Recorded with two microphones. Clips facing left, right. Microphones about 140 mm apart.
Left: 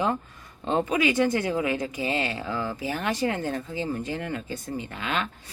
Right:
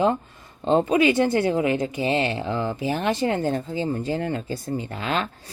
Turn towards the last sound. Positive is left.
turn(degrees=-35)  # may be behind; listen again after turning